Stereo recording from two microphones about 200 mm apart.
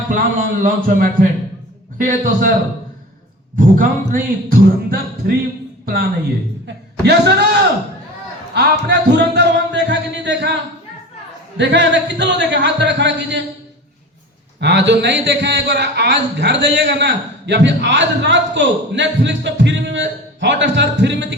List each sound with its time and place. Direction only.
0.1 s speech: 40° right (ahead or behind)
3.6 s a woman's voice: 45° right (ahead or behind)
8.5 s a man's voice: 55° right (ahead or behind)
11.5 s a man's voice: 60° right (ahead or behind)
14.6 s a man's voice: 60° right (ahead or behind)